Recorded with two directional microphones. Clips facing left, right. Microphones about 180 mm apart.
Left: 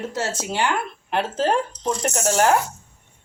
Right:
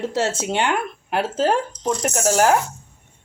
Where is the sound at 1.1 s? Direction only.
5° right (ahead or behind).